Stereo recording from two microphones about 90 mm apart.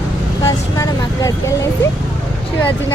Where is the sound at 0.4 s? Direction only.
40° left (ahead or behind).